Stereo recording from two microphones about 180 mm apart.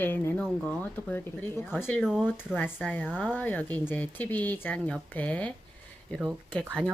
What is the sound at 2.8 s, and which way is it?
Speech, 10° left (ahead or behind).